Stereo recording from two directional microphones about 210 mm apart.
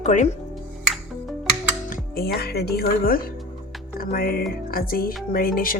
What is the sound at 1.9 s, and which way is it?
Music, 45° left (ahead or behind).